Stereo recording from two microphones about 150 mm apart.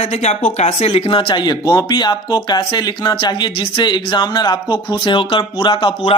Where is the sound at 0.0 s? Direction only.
45° left (ahead or behind).